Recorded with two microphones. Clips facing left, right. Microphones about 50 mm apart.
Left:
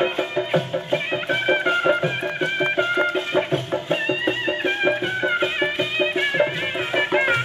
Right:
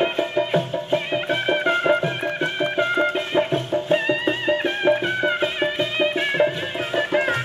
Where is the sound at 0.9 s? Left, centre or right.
Left.